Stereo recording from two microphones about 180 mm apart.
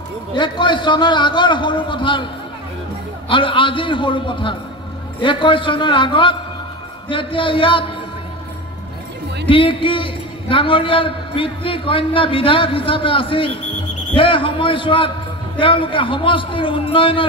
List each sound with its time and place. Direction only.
0.3 s a man's voice: 25° left (ahead or behind)
3.3 s a man's voice: 30° left (ahead or behind)
9.5 s a man's voice: 30° left (ahead or behind)